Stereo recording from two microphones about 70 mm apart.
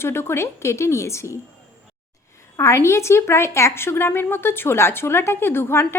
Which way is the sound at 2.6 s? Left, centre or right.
Left.